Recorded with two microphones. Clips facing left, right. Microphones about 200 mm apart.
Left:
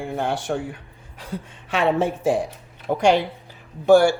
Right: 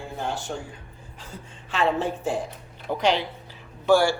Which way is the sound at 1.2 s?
90° left.